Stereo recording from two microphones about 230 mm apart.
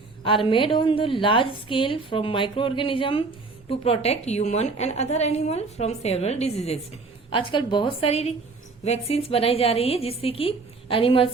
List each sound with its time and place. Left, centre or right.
0.3 s a woman's voice: left